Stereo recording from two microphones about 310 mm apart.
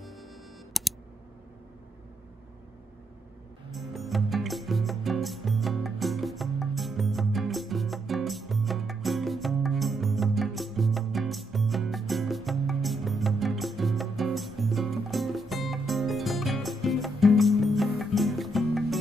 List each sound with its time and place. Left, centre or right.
0.0 s music: centre
0.7 s computer keyboard: centre
3.7 s music: centre